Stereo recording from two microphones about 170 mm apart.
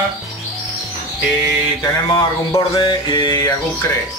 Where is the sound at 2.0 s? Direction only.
30° left (ahead or behind).